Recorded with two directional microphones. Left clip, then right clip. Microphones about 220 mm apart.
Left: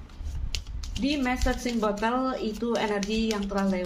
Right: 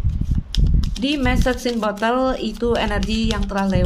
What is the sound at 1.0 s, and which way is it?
Speech, 45° right (ahead or behind).